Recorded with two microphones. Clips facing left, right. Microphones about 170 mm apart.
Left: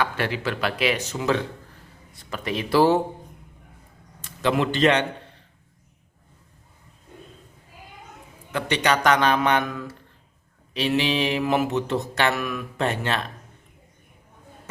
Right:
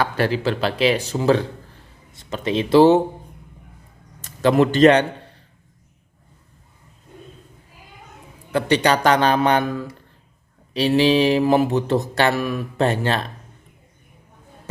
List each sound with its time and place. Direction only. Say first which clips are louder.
0.0 s mantra: right 5 dB; 35° right (ahead or behind)
2.1 s speech: right 6 dB; 25° right (ahead or behind)
4.2 s a man's voice: right 7 dB; 40° right (ahead or behind)
8.5 s mantra: right 5 dB; 35° right (ahead or behind)